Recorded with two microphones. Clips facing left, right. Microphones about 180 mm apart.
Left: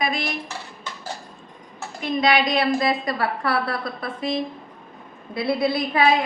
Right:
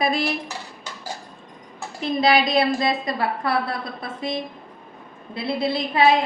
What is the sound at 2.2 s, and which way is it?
A woman's voice, 30° right (ahead or behind).